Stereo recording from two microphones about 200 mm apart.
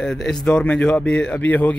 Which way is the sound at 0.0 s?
Centre (ahead or behind).